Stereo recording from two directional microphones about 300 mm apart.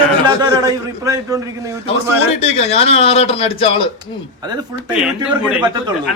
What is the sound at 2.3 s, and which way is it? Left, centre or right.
A man's voice, left.